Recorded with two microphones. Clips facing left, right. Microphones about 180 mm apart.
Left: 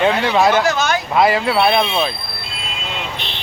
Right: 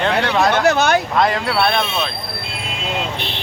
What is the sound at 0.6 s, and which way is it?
Speech, 65° right (ahead or behind).